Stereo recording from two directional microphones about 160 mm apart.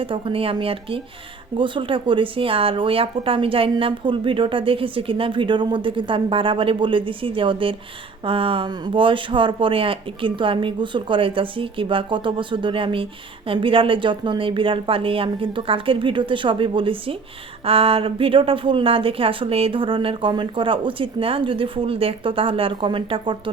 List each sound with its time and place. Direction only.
0.0 s speech: 35° right (ahead or behind)